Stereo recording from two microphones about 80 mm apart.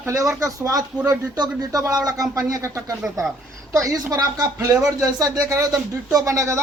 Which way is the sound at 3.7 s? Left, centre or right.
Right.